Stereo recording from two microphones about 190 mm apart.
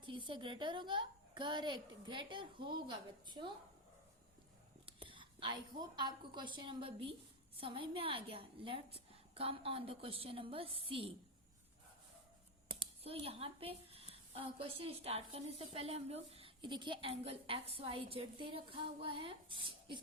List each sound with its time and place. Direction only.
0.0 s a woman's voice: 25° right (ahead or behind)
4.9 s a woman's voice: 25° right (ahead or behind)
12.8 s a woman's voice: 30° right (ahead or behind)